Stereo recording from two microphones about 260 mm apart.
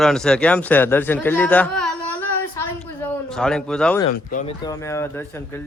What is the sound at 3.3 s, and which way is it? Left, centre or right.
Speech, centre.